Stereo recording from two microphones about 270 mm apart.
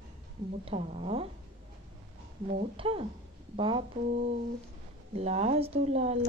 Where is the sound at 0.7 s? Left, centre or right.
Right.